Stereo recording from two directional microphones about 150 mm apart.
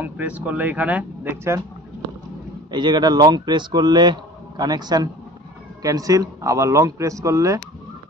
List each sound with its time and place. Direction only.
0.0 s speech: 10° right (ahead or behind)
2.7 s a man's voice: 30° right (ahead or behind)